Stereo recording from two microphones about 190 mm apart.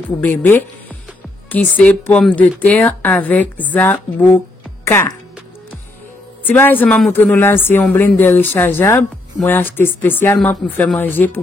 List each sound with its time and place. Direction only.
0.2 s a woman's voice: 10° left (ahead or behind)
6.4 s speech: 10° left (ahead or behind)